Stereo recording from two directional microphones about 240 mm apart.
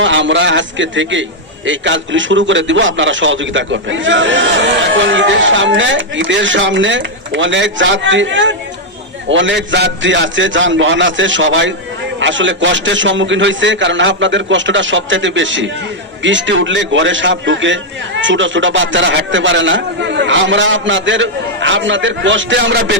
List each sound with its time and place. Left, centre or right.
0.0 s a man's voice: right